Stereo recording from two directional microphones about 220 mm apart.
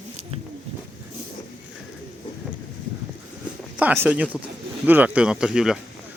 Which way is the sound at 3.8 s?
10° right (ahead or behind).